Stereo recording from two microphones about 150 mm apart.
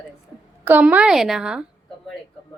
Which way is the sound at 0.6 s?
10° right (ahead or behind).